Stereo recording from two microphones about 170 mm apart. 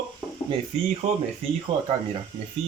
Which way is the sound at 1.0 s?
40° right (ahead or behind).